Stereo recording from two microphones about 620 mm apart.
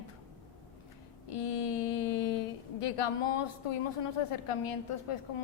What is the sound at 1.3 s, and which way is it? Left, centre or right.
A woman's voice, left.